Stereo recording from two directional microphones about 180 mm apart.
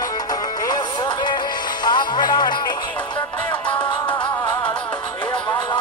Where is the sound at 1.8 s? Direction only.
25° left (ahead or behind).